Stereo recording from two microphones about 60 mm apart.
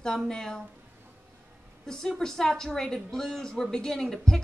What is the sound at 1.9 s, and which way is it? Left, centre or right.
A woman's voice, centre.